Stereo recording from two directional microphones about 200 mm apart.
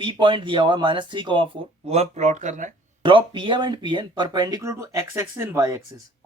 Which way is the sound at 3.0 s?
25° right (ahead or behind).